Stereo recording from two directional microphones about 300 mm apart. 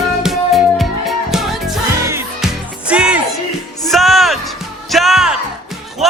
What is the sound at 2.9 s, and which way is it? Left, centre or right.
Music, centre.